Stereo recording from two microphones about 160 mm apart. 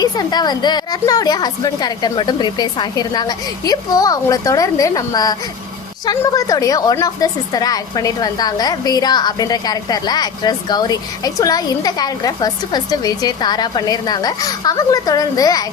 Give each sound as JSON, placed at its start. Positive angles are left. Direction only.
{"t": 0.0, "sound": "a woman's voice", "side_deg": 25}